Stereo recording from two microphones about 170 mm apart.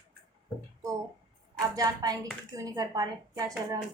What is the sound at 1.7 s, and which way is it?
A woman's voice, 20° right (ahead or behind).